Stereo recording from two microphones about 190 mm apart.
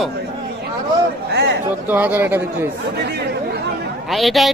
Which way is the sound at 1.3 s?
60° right (ahead or behind).